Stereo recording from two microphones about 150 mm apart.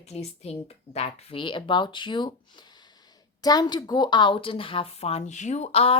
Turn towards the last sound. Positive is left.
turn(degrees=40)  # may be behind; listen again after turning